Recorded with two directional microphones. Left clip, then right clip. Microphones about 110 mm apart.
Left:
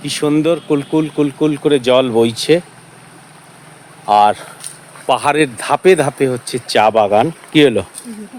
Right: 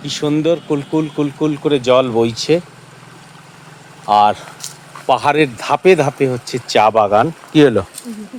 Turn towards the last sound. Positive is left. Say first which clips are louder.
# even
turn(degrees=40)  # may be behind; listen again after turning